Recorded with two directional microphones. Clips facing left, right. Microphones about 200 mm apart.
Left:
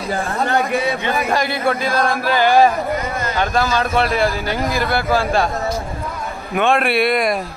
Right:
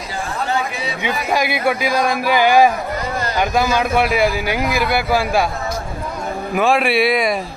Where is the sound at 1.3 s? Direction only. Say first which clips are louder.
Right 3 dB; 10° right (ahead or behind).